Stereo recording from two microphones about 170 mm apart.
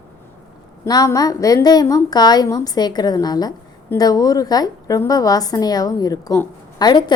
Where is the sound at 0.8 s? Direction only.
20° left (ahead or behind).